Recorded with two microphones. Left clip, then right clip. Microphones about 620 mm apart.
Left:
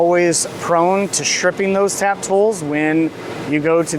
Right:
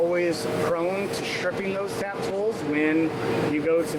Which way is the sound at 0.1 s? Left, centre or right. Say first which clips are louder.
Left 9 dB; left.